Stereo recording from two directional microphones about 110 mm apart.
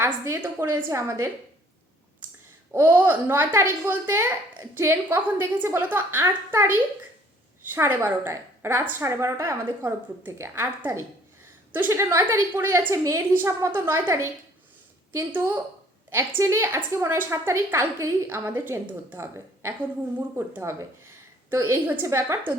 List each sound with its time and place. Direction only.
0.0 s a woman's voice: 25° right (ahead or behind)
2.7 s a woman's voice: 20° right (ahead or behind)